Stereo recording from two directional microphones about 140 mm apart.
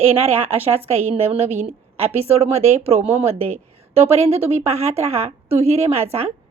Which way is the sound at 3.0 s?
15° right (ahead or behind).